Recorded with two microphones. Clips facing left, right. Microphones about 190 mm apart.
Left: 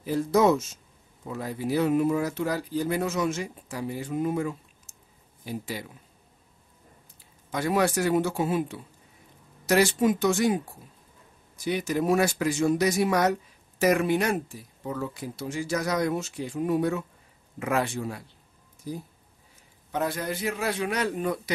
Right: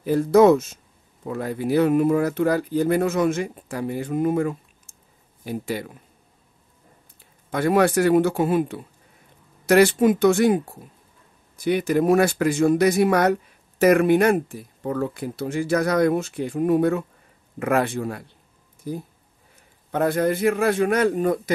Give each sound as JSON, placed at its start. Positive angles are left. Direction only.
{"t": 0.0, "sound": "speech", "side_deg": -60}
{"t": 7.5, "sound": "a man's voice", "side_deg": -60}